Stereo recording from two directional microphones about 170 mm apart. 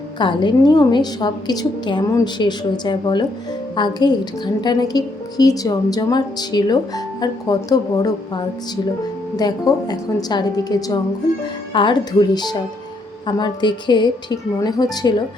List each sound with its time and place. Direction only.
0.2 s a woman's voice: 30° left (ahead or behind)
9.3 s a woman's voice: 20° left (ahead or behind)